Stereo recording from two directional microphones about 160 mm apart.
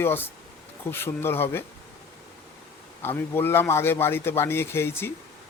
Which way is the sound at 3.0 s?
15° left (ahead or behind).